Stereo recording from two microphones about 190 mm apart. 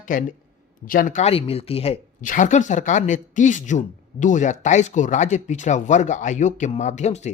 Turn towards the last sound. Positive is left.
turn(degrees=35)  # may be behind; listen again after turning